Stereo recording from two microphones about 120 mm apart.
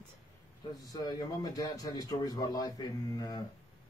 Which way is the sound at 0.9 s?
35° left (ahead or behind).